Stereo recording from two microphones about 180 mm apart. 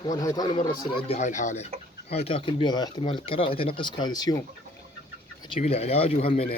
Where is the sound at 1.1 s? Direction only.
45° left (ahead or behind); by 4.4 s 20° left (ahead or behind).